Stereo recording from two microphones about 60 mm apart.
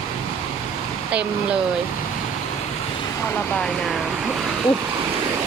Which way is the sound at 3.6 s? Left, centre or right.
Centre.